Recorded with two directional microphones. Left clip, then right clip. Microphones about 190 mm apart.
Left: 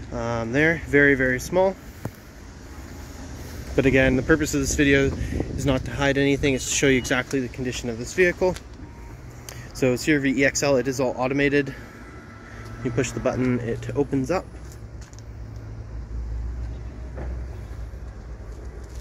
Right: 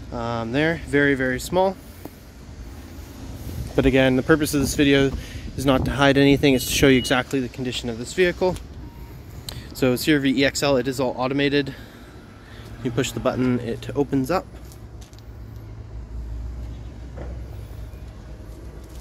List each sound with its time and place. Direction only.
0.2 s speech: 15° right (ahead or behind)
3.7 s speech: 20° right (ahead or behind)
9.8 s speech: 20° right (ahead or behind)
12.8 s speech: 15° right (ahead or behind)